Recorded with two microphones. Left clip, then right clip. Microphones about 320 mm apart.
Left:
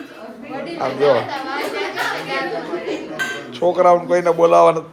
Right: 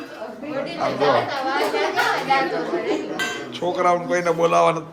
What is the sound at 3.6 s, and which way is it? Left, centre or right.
A man's voice, centre.